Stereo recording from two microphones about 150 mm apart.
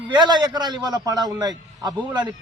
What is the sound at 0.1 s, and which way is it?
A man's voice, 30° right (ahead or behind).